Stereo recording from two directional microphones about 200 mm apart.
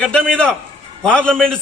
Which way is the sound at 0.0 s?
5° left (ahead or behind).